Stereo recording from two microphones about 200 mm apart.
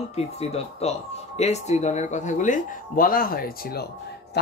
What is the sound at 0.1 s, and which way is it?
Speech, 30° left (ahead or behind).